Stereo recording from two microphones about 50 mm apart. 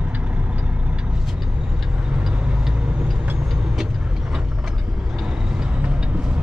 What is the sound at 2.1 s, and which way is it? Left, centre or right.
Vehicle, centre.